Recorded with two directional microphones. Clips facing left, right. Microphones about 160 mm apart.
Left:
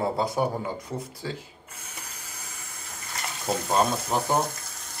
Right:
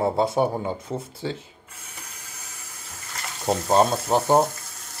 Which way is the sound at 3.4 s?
25° right (ahead or behind).